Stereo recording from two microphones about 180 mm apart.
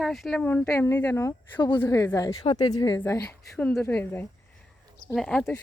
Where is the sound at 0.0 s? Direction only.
Centre (ahead or behind); by 3.2 s 15° left (ahead or behind).